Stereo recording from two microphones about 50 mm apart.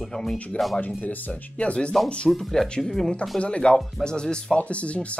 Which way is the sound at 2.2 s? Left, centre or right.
Centre.